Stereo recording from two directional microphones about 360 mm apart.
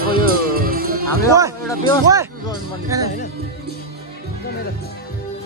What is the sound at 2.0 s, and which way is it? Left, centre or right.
Speech, centre.